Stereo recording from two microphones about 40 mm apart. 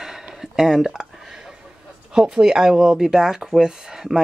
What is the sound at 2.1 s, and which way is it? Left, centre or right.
Speech, centre.